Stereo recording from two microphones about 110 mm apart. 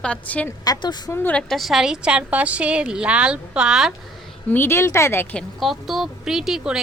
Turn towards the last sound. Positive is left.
turn(degrees=-5)  # may be behind; listen again after turning